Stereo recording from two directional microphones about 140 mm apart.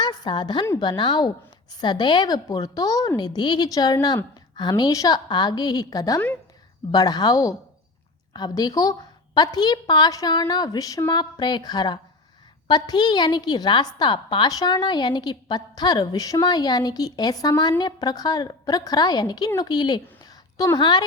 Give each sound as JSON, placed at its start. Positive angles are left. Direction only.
{"t": 0.0, "sound": "a woman's voice", "side_deg": 30}